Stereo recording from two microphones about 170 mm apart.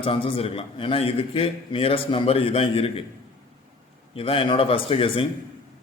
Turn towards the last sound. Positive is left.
turn(degrees=30)  # may be behind; listen again after turning